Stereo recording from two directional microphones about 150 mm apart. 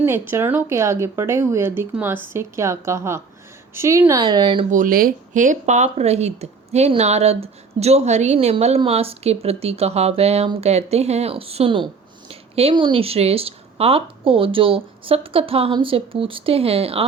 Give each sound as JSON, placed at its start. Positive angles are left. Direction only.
{"t": 0.0, "sound": "speech", "side_deg": -15}
{"t": 4.7, "sound": "speech", "side_deg": -65}